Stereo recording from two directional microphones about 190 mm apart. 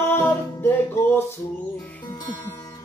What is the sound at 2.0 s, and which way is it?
Music, 20° left (ahead or behind).